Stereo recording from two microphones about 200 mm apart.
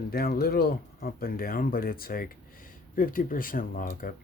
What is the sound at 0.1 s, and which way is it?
Speech, 50° left (ahead or behind).